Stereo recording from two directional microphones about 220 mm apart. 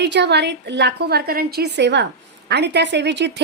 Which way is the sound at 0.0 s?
50° right (ahead or behind).